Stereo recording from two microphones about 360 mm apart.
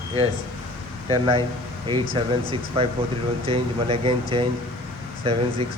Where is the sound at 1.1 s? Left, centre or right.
Centre.